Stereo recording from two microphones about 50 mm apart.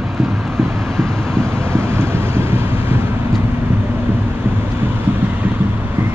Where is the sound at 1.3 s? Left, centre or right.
Right.